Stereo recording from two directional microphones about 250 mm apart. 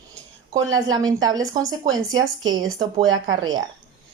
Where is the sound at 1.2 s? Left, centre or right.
Centre.